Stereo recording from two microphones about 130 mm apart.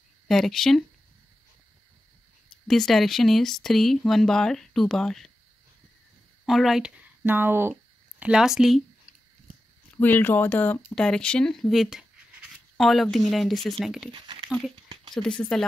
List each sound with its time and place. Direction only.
0.3 s speech: 5° left (ahead or behind)
2.7 s speech: centre (ahead or behind)
6.4 s speech: centre (ahead or behind)
7.2 s speech: 15° right (ahead or behind)
8.2 s speech: 5° right (ahead or behind)
9.9 s speech: 15° left (ahead or behind); by 14.1 s 5° right (ahead or behind)
14.1 s speech: 35° right (ahead or behind)
15.1 s speech: 10° left (ahead or behind)